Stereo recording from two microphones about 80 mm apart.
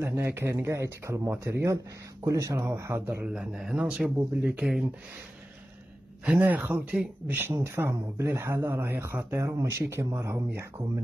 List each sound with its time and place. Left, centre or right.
0.0 s speech: right
3.3 s speech: centre
6.4 s speech: right